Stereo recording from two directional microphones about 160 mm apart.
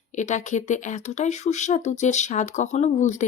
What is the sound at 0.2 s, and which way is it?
Speech, 50° left (ahead or behind).